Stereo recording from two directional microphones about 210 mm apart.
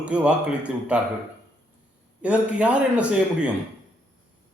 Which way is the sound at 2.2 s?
5° right (ahead or behind).